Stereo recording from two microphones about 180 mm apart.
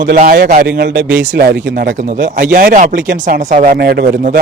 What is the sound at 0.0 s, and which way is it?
Speech, 50° right (ahead or behind).